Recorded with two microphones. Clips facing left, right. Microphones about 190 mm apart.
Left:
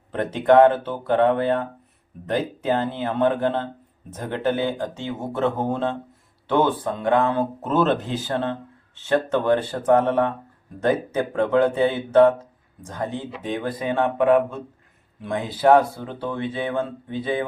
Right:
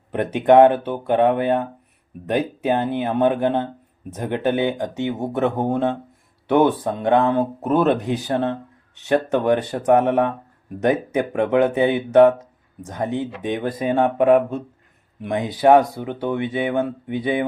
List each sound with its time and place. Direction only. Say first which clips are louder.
0.1 s speech: right 2 dB; 15° right (ahead or behind)
15.2 s speech: right 3 dB; 15° right (ahead or behind)